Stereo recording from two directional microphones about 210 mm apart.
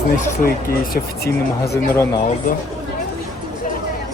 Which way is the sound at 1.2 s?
50° left (ahead or behind).